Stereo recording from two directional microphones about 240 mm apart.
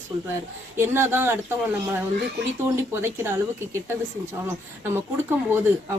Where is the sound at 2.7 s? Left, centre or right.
Centre.